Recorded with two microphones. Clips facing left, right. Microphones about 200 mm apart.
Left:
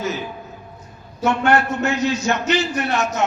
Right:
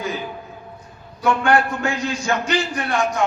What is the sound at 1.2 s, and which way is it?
A man's voice, 25° left (ahead or behind).